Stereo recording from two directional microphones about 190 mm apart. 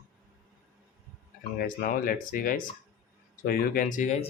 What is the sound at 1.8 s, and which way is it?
Speech, 45° left (ahead or behind).